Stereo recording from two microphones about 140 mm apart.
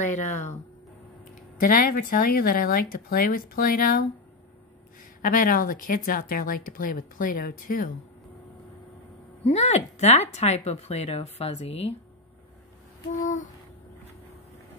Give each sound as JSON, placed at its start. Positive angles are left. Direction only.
{"t": 1.6, "sound": "speech", "side_deg": 80}
{"t": 5.2, "sound": "speech", "side_deg": 85}
{"t": 9.4, "sound": "speech", "side_deg": 50}
{"t": 13.1, "sound": "a sound", "side_deg": 65}